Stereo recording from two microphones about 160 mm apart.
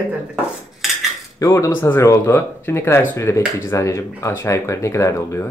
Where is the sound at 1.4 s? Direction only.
20° left (ahead or behind).